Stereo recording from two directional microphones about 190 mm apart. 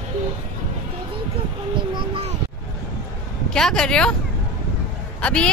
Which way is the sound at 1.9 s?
30° right (ahead or behind).